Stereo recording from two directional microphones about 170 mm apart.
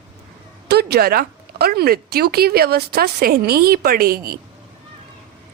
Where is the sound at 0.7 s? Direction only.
70° right (ahead or behind).